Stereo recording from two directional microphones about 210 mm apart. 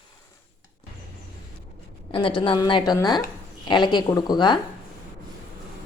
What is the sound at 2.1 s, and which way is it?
A woman's voice, 25° left (ahead or behind).